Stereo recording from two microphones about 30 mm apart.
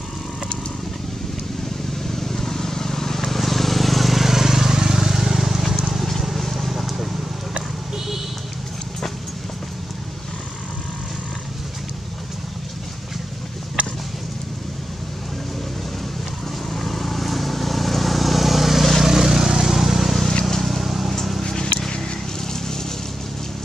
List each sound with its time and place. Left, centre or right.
2.0 s vehicle: centre
5.9 s vehicle: centre
16.7 s vehicle: centre
21.4 s vehicle: left